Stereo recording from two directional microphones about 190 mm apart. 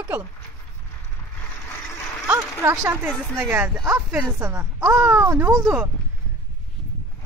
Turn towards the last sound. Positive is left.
turn(degrees=-15)  # may be behind; listen again after turning